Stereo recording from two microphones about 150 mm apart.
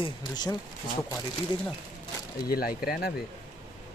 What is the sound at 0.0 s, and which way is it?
Speech, 25° left (ahead or behind).